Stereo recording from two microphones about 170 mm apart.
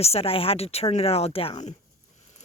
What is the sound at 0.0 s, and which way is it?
Speech, 35° left (ahead or behind).